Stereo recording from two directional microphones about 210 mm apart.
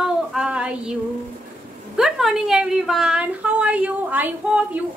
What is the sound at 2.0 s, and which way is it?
A woman's voice, centre (ahead or behind).